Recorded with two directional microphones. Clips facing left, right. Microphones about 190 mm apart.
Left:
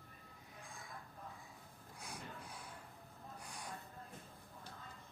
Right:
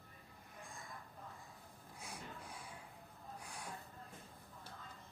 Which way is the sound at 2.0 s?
Centre (ahead or behind).